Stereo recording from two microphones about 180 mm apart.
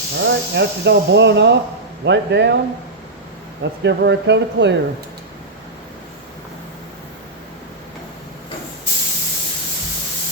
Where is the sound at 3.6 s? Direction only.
75° right (ahead or behind).